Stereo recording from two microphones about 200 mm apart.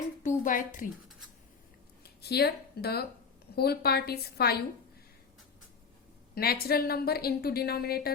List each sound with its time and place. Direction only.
0.2 s a sound: 40° left (ahead or behind)
2.0 s a woman's voice: 50° left (ahead or behind)
6.3 s a woman's voice: 50° left (ahead or behind)